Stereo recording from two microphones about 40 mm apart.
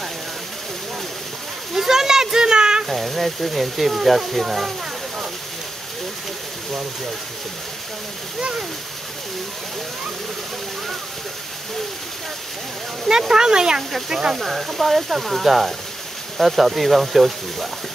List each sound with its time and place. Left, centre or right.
1.7 s a sound: centre
2.9 s speech: centre
13.3 s speech: centre